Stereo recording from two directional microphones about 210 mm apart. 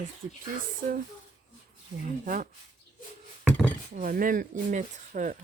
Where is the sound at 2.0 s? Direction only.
40° right (ahead or behind).